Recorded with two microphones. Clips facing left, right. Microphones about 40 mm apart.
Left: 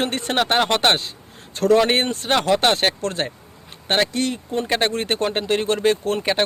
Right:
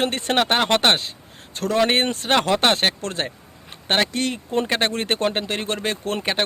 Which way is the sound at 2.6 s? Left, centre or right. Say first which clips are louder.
Left 1 dB; right.